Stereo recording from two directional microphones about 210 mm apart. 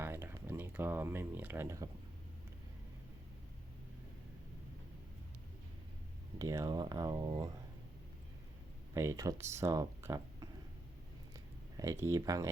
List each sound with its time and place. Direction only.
0.0 s a sound: 10° right (ahead or behind)
6.4 s speech: 15° right (ahead or behind)
9.0 s speech: 15° right (ahead or behind)
11.8 s speech: 15° right (ahead or behind)